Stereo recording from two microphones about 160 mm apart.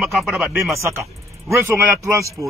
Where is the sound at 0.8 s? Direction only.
20° right (ahead or behind).